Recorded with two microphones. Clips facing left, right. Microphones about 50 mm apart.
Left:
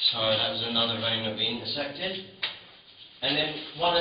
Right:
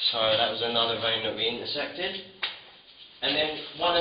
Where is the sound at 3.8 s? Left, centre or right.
Centre.